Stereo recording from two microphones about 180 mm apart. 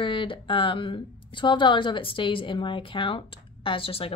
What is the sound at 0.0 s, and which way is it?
A woman's voice, 30° left (ahead or behind).